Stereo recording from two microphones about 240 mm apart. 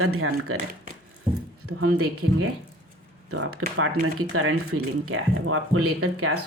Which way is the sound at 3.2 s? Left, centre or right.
Right.